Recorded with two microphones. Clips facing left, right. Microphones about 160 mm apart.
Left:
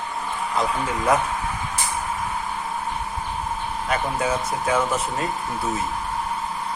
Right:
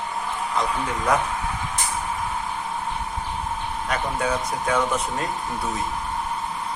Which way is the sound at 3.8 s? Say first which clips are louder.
Left 1 dB; 5° left (ahead or behind).